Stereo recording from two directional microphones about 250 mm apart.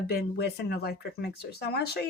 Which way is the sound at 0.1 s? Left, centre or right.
Left.